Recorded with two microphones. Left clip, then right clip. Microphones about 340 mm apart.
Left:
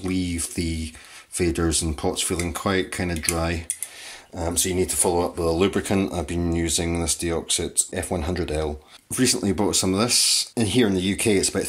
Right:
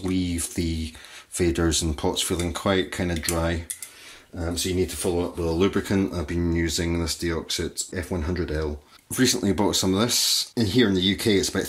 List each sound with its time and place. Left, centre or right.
0.0 s speech: centre
4.6 s speech: centre